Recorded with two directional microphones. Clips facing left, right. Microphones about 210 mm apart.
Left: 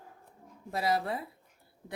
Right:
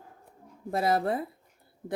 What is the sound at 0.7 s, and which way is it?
Speech, 50° right (ahead or behind).